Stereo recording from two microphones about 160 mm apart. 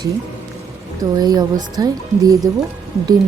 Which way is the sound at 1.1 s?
25° right (ahead or behind).